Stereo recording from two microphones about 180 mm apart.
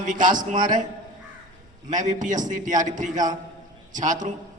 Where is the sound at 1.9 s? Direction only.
45° right (ahead or behind).